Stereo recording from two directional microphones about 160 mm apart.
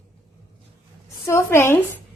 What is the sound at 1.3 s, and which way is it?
Speech, 15° left (ahead or behind).